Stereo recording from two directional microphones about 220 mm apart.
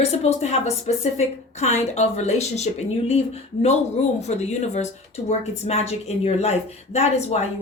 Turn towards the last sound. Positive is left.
turn(degrees=30)  # may be behind; listen again after turning